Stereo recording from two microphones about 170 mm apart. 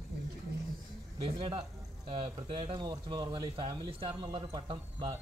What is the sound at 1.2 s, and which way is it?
Speech, 30° right (ahead or behind).